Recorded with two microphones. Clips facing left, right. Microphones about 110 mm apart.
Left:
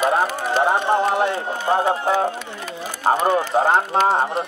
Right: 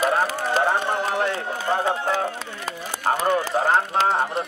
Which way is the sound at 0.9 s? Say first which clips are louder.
Left 5 dB; 25° left (ahead or behind).